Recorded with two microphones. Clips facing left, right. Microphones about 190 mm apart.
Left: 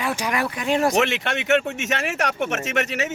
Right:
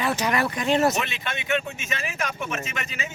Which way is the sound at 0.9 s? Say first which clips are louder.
Left 8 dB; 75° left (ahead or behind).